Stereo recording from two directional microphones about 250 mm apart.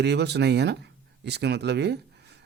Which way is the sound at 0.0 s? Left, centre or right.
Right.